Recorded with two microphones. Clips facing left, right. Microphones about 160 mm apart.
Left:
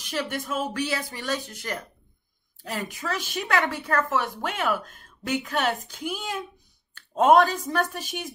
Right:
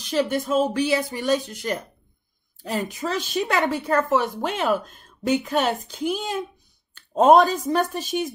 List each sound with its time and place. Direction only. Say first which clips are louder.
0.1 s speech: right 8 dB; 25° right (ahead or behind)